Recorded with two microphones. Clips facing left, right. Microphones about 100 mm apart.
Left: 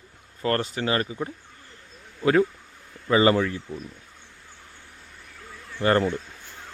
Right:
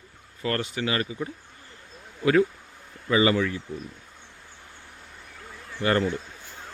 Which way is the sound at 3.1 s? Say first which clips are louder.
Left 2 dB; 35° left (ahead or behind).